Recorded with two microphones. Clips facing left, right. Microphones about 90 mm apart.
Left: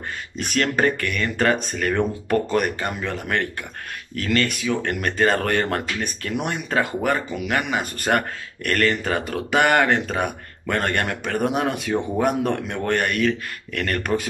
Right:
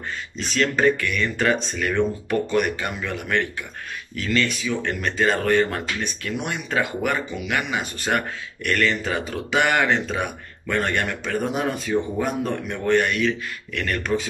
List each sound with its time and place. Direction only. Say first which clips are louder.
0.4 s speech: even; 50° left (ahead or behind)
4.1 s speech: left 1 dB; 50° left (ahead or behind)